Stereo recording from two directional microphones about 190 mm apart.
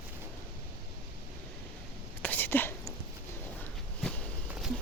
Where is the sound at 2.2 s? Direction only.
10° left (ahead or behind).